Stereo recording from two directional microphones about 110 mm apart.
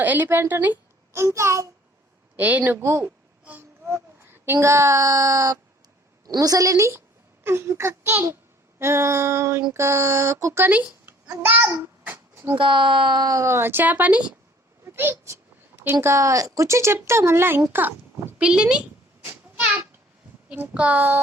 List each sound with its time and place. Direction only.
0.0 s speech: 15° right (ahead or behind)
2.3 s a woman's voice: 15° right (ahead or behind)
12.1 s a sound: 20° right (ahead or behind)
12.5 s speech: 45° right (ahead or behind); by 18.8 s 10° right (ahead or behind)
19.2 s a sound: 20° right (ahead or behind)
20.5 s a woman's voice: 10° right (ahead or behind)